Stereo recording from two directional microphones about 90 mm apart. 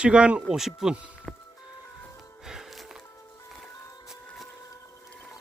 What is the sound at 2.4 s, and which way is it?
Music, 5° right (ahead or behind).